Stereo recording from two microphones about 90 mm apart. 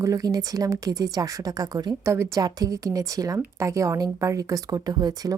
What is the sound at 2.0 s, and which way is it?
Speech, 30° right (ahead or behind).